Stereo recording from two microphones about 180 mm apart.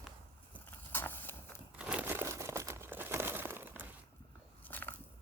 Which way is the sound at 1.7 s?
5° right (ahead or behind).